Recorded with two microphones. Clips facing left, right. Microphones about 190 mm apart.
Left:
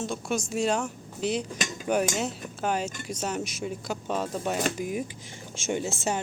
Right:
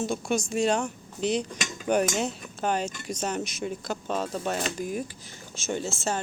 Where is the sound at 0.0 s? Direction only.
Centre (ahead or behind).